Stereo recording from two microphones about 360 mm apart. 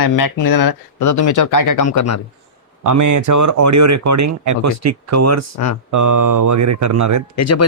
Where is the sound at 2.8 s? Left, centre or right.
Right.